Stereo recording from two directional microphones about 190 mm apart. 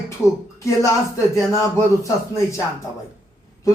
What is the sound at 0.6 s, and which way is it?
Speech, 15° left (ahead or behind).